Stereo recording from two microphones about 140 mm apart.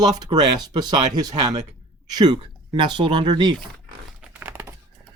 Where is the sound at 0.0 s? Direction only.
30° right (ahead or behind).